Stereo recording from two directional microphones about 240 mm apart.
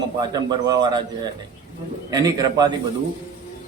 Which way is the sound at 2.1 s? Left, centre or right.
Centre.